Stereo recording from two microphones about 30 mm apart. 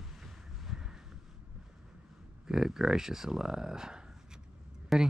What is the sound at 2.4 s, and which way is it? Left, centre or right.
Speech, right.